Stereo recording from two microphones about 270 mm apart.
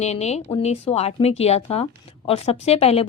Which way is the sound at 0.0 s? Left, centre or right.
Left.